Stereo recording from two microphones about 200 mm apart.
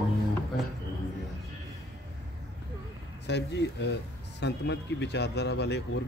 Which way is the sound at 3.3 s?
60° left (ahead or behind).